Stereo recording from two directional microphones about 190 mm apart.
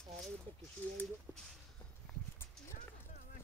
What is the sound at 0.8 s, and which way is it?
Speech, 10° left (ahead or behind).